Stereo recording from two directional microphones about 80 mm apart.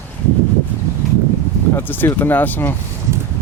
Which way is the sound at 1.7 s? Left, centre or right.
Left.